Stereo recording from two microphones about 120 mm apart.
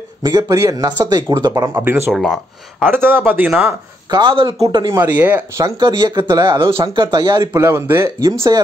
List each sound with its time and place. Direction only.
0.2 s speech: 30° right (ahead or behind)
1.5 s speech: 20° right (ahead or behind)
2.1 s speech: centre (ahead or behind)
2.9 s speech: 15° right (ahead or behind)
4.1 s speech: 45° right (ahead or behind)
5.0 s speech: 15° right (ahead or behind)
5.8 s speech: 40° right (ahead or behind)
6.1 s speech: 25° right (ahead or behind)
6.4 s speech: 40° right (ahead or behind)